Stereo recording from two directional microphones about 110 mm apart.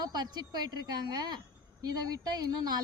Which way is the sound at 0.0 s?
40° right (ahead or behind).